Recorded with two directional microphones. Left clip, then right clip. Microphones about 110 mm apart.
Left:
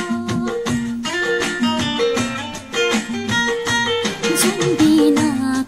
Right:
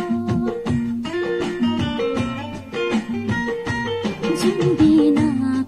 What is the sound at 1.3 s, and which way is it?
Music, 35° right (ahead or behind).